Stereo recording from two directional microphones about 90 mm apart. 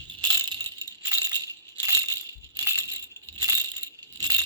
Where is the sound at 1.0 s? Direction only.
40° right (ahead or behind).